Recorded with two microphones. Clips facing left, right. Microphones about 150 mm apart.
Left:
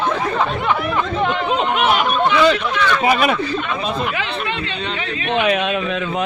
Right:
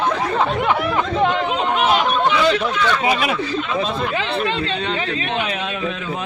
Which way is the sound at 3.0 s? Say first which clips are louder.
Left 3 dB; 50° left (ahead or behind).